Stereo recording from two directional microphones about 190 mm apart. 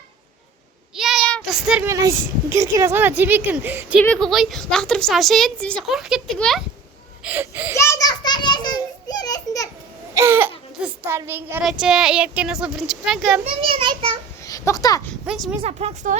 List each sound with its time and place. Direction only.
0.9 s child singing: centre (ahead or behind)
1.9 s a woman's voice: 15° right (ahead or behind)
4.0 s a woman's voice: 5° left (ahead or behind)
7.8 s children playing: 15° left (ahead or behind)
10.2 s a sound: 10° right (ahead or behind)
10.8 s a woman's voice: 10° right (ahead or behind)
13.4 s a child's voice: 30° right (ahead or behind)
14.4 s a sound: 15° left (ahead or behind)
15.3 s a woman's voice: 5° right (ahead or behind)
15.6 s a woman's voice: 35° right (ahead or behind)